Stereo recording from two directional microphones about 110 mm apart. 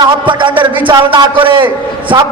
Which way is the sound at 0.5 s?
50° right (ahead or behind).